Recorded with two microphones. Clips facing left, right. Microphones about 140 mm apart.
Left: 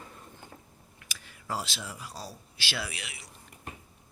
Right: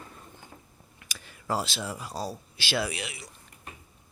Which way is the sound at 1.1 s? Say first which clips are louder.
Right 5 dB; 35° right (ahead or behind).